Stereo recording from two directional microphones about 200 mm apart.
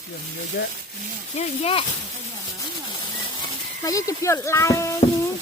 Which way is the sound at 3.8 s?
15° left (ahead or behind).